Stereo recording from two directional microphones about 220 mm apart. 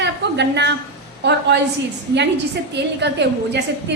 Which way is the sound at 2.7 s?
50° right (ahead or behind).